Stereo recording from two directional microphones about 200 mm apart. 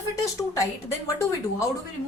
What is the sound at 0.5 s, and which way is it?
Speech, 15° left (ahead or behind).